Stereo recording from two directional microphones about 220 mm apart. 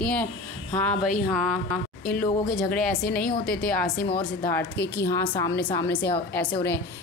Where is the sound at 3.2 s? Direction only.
40° left (ahead or behind).